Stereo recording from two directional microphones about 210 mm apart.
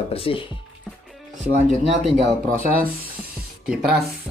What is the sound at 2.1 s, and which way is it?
Speech, 40° right (ahead or behind).